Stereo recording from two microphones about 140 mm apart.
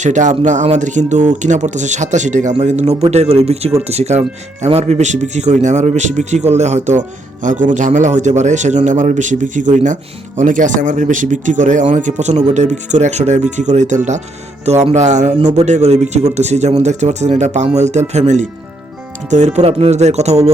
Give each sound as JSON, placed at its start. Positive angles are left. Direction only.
{"t": 0.0, "sound": "a man's voice", "side_deg": -60}
{"t": 7.4, "sound": "a man's voice", "side_deg": -65}